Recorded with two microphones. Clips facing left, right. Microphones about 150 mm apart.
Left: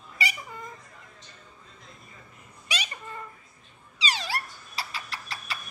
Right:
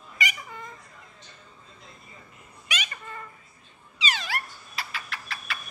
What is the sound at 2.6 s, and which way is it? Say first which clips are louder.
Cat: even; 35° left (ahead or behind).